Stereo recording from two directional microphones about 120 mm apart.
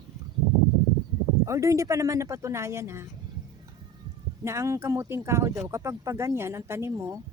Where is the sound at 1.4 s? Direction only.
25° right (ahead or behind).